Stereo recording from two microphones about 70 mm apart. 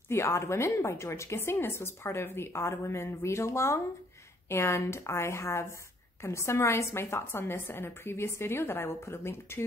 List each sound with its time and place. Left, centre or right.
0.1 s speech: left